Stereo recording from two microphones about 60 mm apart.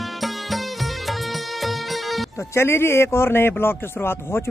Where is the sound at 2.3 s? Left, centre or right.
Left.